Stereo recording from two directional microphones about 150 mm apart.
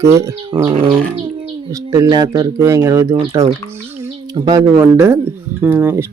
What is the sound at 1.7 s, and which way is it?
Speech, 25° right (ahead or behind).